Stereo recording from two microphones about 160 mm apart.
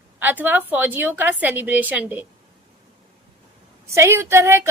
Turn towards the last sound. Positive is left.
turn(degrees=-15)  # may be behind; listen again after turning